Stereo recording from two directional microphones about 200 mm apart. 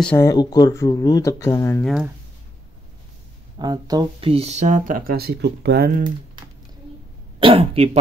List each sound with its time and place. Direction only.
0.0 s speech: 10° left (ahead or behind)
3.5 s speech: 20° right (ahead or behind); by 6.0 s 50° right (ahead or behind)
7.3 s speech: 25° right (ahead or behind)